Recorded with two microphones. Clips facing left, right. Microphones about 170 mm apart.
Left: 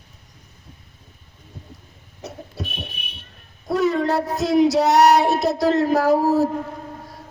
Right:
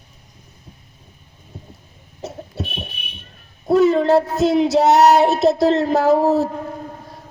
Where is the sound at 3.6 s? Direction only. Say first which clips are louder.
Right 6 dB; 25° right (ahead or behind).